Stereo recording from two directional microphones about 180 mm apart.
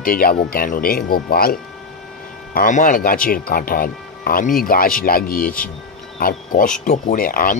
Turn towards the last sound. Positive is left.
turn(degrees=50)  # may be behind; listen again after turning